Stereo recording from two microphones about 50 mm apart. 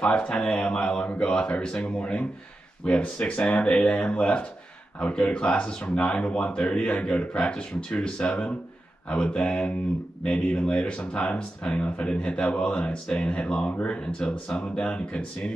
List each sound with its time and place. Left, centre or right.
0.0 s speech: left